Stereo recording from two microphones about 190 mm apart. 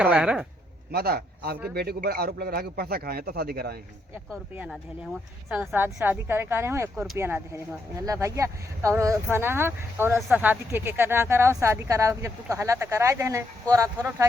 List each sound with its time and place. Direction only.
0.0 s speech: 5° right (ahead or behind)
0.9 s a man's voice: 55° right (ahead or behind)
4.3 s speech: 5° right (ahead or behind)